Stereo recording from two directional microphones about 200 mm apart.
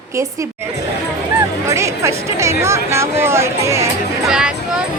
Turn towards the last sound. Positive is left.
turn(degrees=-5)  # may be behind; listen again after turning